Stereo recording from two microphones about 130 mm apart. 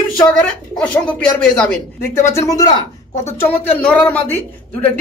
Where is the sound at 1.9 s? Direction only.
20° left (ahead or behind).